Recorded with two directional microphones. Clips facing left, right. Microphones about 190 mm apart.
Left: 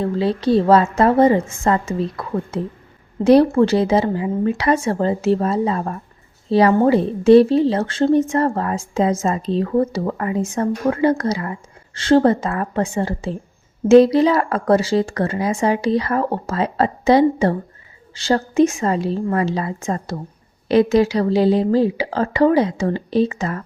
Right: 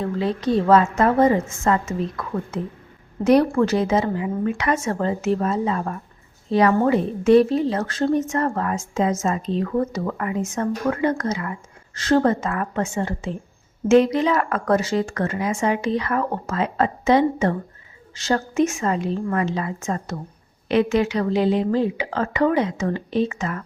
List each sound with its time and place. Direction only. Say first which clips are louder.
0.0 s a woman's voice: left 4 dB; 30° left (ahead or behind)